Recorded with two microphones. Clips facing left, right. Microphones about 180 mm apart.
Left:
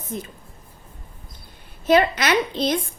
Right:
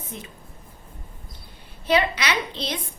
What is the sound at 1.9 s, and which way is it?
Speech, 50° left (ahead or behind).